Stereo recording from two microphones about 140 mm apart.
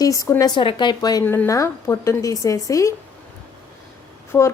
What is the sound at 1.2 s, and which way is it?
A woman's voice, 15° left (ahead or behind).